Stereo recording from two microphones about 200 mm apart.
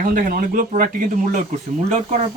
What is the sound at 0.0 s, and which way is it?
Speech, 45° right (ahead or behind).